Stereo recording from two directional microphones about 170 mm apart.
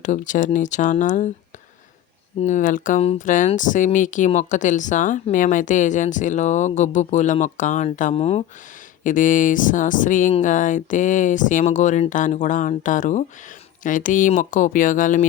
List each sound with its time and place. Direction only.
0.0 s speech: 45° left (ahead or behind)
2.4 s speech: 45° left (ahead or behind)
8.1 s speech: 35° left (ahead or behind)
9.0 s speech: 50° left (ahead or behind)